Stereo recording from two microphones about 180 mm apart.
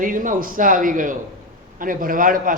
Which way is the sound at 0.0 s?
50° right (ahead or behind).